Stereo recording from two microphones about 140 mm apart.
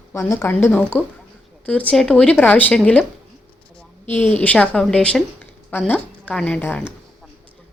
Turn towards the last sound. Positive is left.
turn(degrees=10)  # may be behind; listen again after turning